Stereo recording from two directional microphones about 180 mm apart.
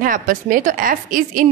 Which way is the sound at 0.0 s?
50° right (ahead or behind).